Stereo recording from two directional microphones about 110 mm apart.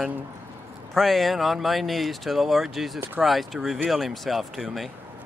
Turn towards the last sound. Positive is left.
turn(degrees=0)  # may be behind; listen again after turning